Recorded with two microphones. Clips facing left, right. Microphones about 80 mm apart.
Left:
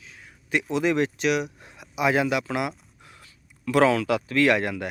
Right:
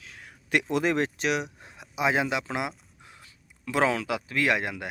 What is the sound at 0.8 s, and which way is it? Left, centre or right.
Speech, right.